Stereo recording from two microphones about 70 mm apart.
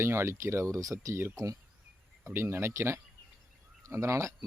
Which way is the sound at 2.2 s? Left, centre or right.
Right.